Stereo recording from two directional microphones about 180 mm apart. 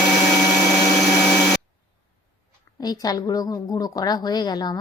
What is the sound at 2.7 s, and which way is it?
A woman's voice, 20° left (ahead or behind).